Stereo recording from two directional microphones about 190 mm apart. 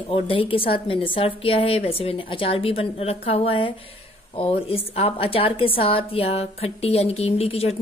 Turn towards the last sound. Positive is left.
turn(degrees=30)  # may be behind; listen again after turning